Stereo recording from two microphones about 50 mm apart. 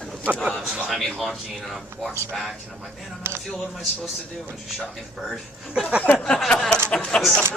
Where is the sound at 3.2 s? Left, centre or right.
Right.